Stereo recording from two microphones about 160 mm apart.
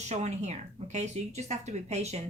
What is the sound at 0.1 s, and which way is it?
Speech, 45° right (ahead or behind).